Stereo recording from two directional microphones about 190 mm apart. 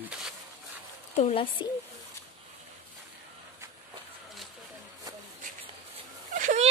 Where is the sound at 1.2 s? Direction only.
30° left (ahead or behind).